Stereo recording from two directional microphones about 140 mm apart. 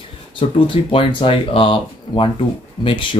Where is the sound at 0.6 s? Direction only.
40° left (ahead or behind).